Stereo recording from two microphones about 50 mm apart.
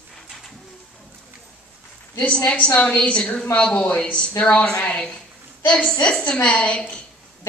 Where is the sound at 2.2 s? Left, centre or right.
Left.